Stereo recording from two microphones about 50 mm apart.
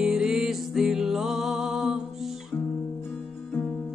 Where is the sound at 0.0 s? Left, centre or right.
Centre.